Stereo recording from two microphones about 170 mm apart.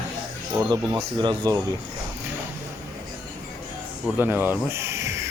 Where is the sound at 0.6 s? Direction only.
25° right (ahead or behind).